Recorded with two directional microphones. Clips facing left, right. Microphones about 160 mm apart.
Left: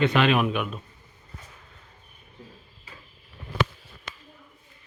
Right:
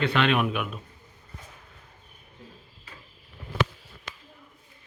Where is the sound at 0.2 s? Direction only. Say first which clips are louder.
Left 2 dB; 5° left (ahead or behind).